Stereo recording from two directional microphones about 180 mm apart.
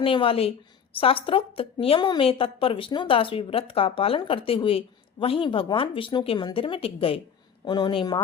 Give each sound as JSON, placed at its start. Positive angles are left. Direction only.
{"t": 0.0, "sound": "a woman's voice", "side_deg": 30}